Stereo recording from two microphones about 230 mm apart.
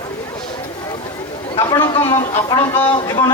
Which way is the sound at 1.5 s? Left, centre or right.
Centre.